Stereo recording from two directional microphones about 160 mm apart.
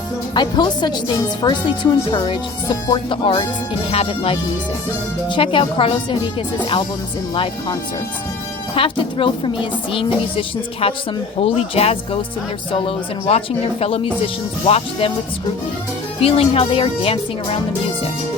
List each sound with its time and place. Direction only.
0.3 s speech: 30° left (ahead or behind)
8.7 s speech: 35° left (ahead or behind)
16.2 s speech: 35° left (ahead or behind)